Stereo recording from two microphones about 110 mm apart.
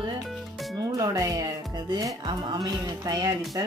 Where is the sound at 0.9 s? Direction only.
35° right (ahead or behind).